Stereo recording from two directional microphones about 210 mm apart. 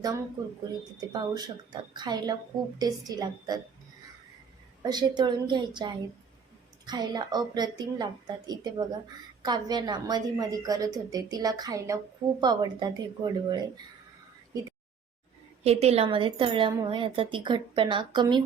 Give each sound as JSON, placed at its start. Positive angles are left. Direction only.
{"t": 0.9, "sound": "a woman's voice", "side_deg": -15}
{"t": 4.8, "sound": "a woman's voice", "side_deg": -20}
{"t": 15.6, "sound": "a woman's voice", "side_deg": -30}